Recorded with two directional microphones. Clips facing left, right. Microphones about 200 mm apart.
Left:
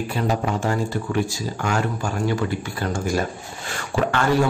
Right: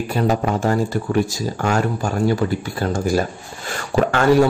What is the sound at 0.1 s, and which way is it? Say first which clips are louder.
Speech: right 6 dB; 40° right (ahead or behind).